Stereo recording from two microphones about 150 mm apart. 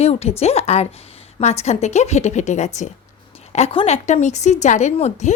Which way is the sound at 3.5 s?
40° left (ahead or behind).